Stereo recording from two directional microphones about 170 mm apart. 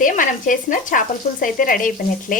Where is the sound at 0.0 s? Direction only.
50° left (ahead or behind).